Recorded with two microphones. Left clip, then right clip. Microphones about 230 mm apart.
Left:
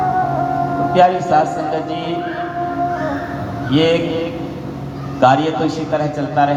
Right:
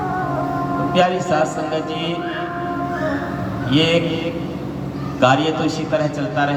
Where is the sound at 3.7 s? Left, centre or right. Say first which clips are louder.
Left 3 dB; right.